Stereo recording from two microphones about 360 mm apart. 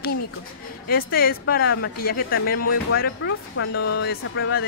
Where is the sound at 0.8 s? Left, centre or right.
Left.